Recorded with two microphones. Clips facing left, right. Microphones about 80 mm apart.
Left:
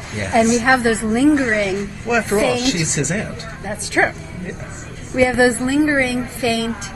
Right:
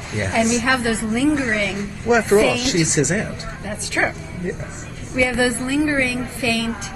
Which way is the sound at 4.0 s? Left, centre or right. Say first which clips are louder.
Left 4 dB; left.